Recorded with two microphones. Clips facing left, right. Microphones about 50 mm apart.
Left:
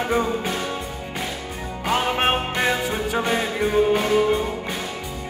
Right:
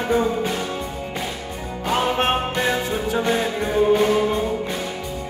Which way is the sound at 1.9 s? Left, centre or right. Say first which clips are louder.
Right 1 dB; centre.